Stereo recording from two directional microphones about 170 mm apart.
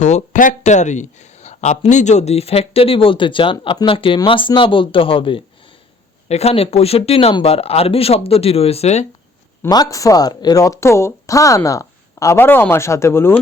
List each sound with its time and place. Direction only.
0.0 s speech: 45° left (ahead or behind)
9.6 s speech: 20° left (ahead or behind)